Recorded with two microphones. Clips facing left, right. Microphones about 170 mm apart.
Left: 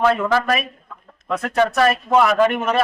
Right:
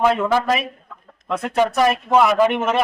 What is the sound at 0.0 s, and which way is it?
A man's voice, 15° right (ahead or behind).